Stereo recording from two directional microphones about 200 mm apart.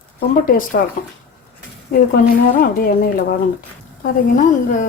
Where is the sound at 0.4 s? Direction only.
45° left (ahead or behind).